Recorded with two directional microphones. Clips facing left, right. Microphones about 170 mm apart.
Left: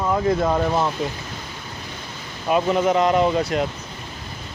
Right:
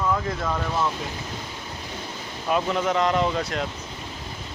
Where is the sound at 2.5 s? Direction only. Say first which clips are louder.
Left 5 dB; 5° left (ahead or behind).